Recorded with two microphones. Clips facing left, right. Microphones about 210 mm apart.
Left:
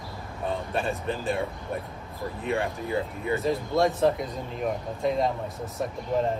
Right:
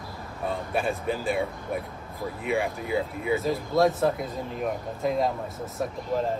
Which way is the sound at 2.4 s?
10° right (ahead or behind).